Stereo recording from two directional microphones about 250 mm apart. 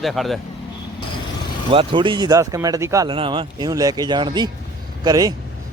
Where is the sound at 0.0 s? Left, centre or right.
Centre.